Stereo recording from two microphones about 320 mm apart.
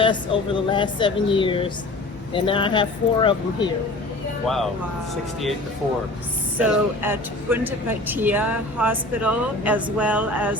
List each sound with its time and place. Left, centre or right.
0.0 s speech: centre
4.4 s speech: centre
6.6 s speech: centre